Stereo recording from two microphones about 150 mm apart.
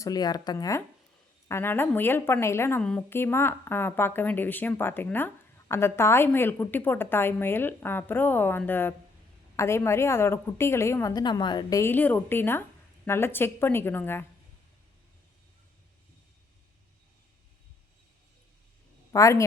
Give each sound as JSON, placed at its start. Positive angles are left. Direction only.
{"t": 0.0, "sound": "a woman's voice", "side_deg": 25}
{"t": 11.8, "sound": "a woman's voice", "side_deg": 15}
{"t": 19.1, "sound": "a woman's voice", "side_deg": 20}